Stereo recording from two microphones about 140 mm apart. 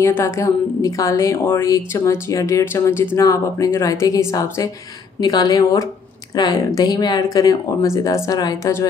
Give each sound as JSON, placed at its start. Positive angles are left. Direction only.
{"t": 0.0, "sound": "a woman's voice", "side_deg": 20}